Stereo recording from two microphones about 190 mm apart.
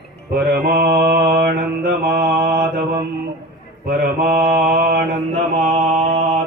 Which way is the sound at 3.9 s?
55° right (ahead or behind).